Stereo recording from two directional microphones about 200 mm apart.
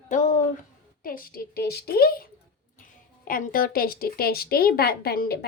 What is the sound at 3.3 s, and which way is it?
A woman's voice, 45° left (ahead or behind).